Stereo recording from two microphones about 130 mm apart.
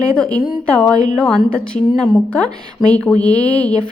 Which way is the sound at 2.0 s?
5° left (ahead or behind).